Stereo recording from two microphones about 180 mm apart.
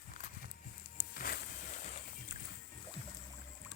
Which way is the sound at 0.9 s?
50° left (ahead or behind).